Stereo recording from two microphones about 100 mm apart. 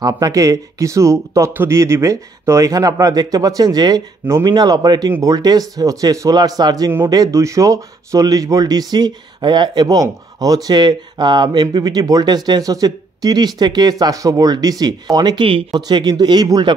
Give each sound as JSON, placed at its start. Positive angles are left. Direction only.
{"t": 0.0, "sound": "speech", "side_deg": -35}